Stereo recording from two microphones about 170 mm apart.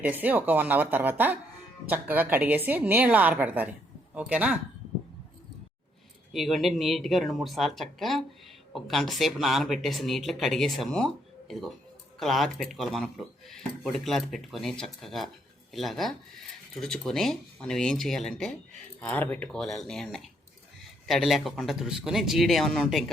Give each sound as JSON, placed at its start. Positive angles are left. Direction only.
{"t": 0.0, "sound": "a woman's voice", "side_deg": -10}
{"t": 6.3, "sound": "speech", "side_deg": 0}